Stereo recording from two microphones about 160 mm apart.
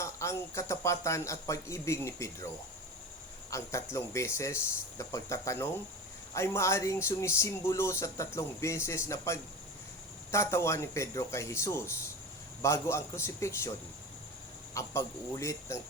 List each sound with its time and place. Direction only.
0.0 s speech: 20° left (ahead or behind)
3.5 s speech: 20° left (ahead or behind)